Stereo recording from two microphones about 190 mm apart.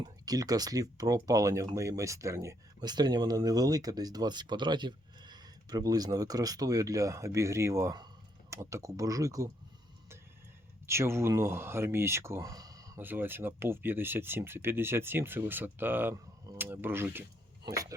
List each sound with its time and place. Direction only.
0.0 s speech: 20° right (ahead or behind)
10.8 s speech: 15° right (ahead or behind)